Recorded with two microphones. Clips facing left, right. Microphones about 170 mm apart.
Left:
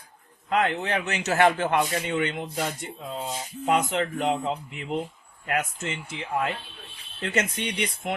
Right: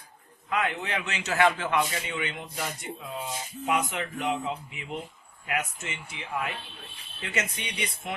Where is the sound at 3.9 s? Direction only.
55° left (ahead or behind).